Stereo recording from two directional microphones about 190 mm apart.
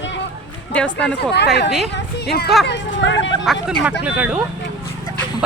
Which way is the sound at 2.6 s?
75° left (ahead or behind).